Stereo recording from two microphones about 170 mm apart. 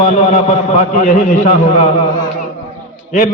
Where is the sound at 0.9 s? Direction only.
50° left (ahead or behind).